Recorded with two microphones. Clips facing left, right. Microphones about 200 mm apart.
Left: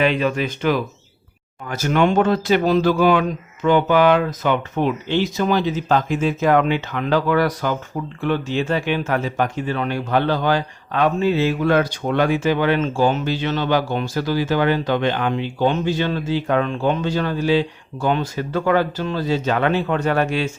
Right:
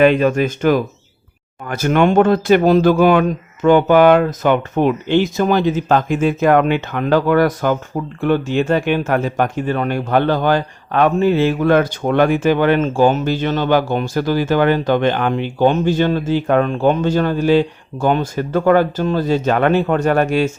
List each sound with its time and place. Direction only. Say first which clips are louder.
0.0 s speech: right 6 dB; 50° right (ahead or behind)